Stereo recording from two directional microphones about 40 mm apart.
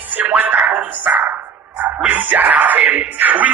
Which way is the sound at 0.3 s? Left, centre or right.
Right.